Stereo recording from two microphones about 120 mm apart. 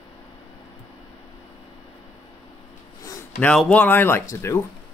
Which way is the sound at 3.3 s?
10° left (ahead or behind).